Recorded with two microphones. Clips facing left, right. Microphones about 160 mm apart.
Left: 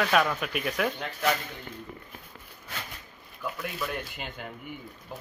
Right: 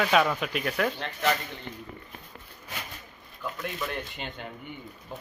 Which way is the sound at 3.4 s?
5° left (ahead or behind).